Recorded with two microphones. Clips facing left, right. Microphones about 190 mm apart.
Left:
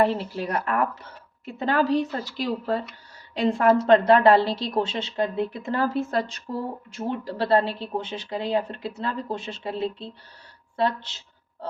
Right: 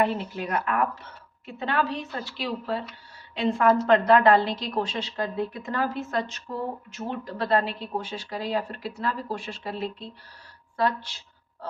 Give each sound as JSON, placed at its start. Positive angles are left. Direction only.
{"t": 0.0, "sound": "a woman's voice", "side_deg": 35}